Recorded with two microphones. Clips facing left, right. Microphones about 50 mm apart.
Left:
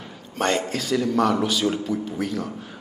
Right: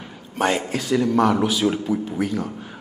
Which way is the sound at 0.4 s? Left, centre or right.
Centre.